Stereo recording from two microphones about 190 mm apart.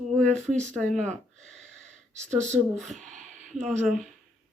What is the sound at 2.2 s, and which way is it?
Speech, 40° right (ahead or behind).